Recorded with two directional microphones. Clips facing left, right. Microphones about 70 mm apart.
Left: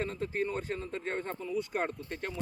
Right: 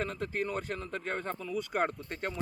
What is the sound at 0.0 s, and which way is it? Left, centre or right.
Speech, right.